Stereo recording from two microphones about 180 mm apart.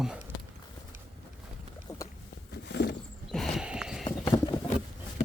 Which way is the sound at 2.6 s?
70° left (ahead or behind).